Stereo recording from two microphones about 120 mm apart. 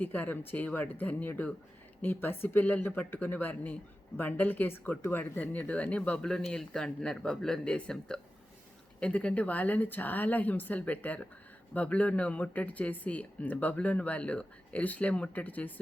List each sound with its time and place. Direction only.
0.0 s speech: 15° left (ahead or behind)